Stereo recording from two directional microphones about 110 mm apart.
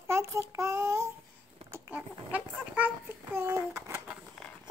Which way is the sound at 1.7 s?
15° right (ahead or behind).